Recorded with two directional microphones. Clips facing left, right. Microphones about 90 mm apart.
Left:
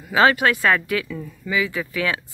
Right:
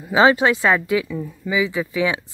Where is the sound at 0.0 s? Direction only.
20° right (ahead or behind).